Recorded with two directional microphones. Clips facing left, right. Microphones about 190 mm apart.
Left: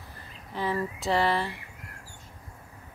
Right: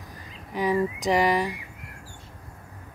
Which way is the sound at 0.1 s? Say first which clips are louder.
Right 4 dB; 15° right (ahead or behind).